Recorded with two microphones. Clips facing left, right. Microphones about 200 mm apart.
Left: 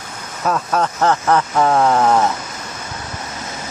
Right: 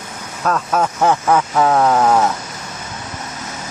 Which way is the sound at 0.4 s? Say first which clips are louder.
Right 1 dB; 5° left (ahead or behind).